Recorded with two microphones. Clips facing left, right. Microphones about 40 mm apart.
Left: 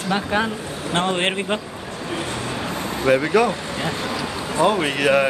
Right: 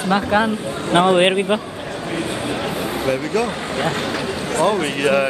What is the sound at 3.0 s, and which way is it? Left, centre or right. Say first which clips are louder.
Speech: left 5 dB; left.